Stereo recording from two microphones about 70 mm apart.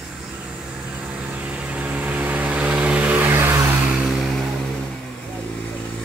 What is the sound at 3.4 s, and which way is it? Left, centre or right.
Vehicle, right.